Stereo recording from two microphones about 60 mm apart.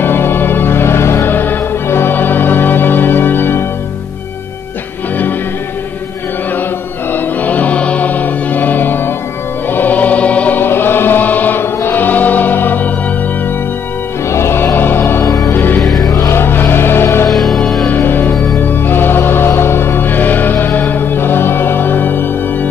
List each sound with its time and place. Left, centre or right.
0.0 s music: left
7.1 s music: left
10.6 s music: left
14.3 s music: left
15.2 s music: left
15.5 s music: left
15.8 s music: centre
16.1 s music: left
16.3 s choir: left
17.3 s music: centre
17.8 s music: left